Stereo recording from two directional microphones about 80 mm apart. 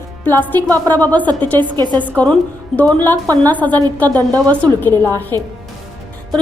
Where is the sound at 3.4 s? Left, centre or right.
Left.